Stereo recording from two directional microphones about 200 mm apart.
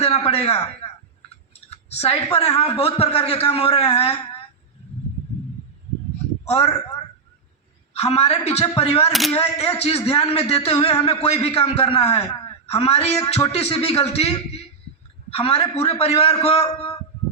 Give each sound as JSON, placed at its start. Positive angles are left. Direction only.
{"t": 0.0, "sound": "a man's voice", "side_deg": 30}
{"t": 6.5, "sound": "a man's voice", "side_deg": 30}
{"t": 7.9, "sound": "a man's voice", "side_deg": 30}